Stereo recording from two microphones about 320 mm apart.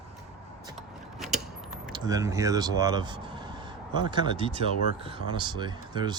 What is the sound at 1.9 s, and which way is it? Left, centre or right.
Speech, centre.